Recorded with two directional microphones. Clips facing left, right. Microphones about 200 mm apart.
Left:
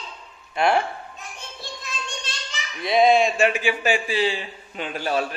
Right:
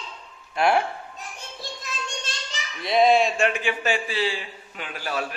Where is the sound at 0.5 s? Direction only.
Centre (ahead or behind).